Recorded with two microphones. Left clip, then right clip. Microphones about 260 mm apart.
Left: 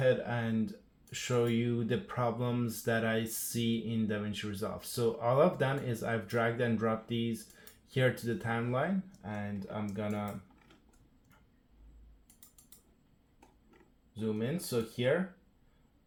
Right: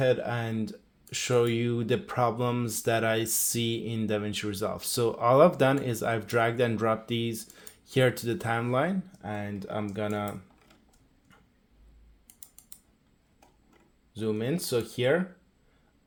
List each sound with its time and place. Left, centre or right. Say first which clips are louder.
0.0 s speech: right 4 dB; right
12.3 s typing: right 7 dB; right
14.1 s speech: right 6 dB; right